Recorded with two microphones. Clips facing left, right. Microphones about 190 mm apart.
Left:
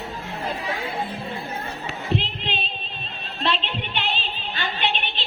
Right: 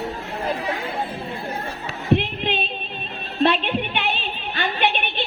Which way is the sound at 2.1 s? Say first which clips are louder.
Right 7 dB; 55° right (ahead or behind).